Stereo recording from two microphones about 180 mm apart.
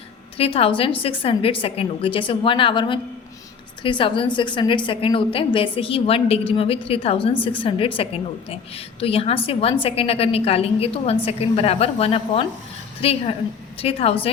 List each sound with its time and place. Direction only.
0.3 s a woman's voice: 30° left (ahead or behind)